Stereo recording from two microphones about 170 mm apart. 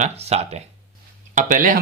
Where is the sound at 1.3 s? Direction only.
50° right (ahead or behind).